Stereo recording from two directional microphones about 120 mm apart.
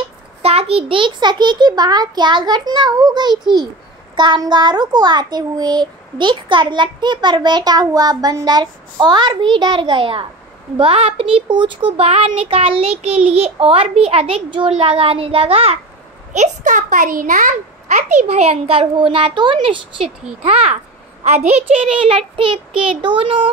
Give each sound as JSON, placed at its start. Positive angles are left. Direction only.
{"t": 0.4, "sound": "a child's voice", "side_deg": -55}
{"t": 12.1, "sound": "a child's voice", "side_deg": -55}
{"t": 16.3, "sound": "a child's voice", "side_deg": -90}
{"t": 20.4, "sound": "a child's voice", "side_deg": -65}